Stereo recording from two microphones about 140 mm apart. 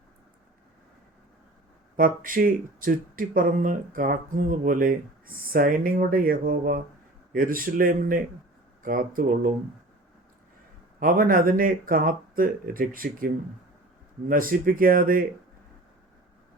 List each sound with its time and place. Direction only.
2.0 s speech: 80° right
11.0 s speech: 85° right